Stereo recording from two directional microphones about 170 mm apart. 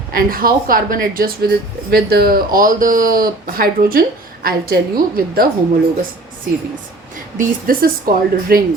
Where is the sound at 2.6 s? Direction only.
55° right (ahead or behind).